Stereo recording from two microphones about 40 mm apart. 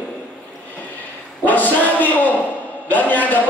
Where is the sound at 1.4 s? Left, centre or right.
Left.